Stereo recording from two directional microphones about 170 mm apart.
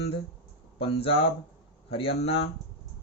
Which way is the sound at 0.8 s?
35° left (ahead or behind).